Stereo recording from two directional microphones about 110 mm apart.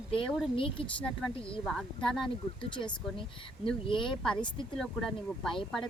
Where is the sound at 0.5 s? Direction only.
55° left (ahead or behind).